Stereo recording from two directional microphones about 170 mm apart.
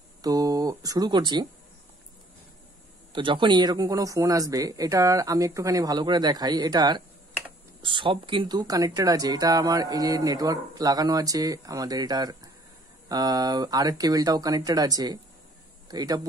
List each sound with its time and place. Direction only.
0.2 s speech: 20° right (ahead or behind)
3.1 s speech: 30° right (ahead or behind)